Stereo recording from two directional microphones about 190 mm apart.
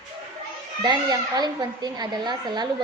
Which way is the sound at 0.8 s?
20° right (ahead or behind).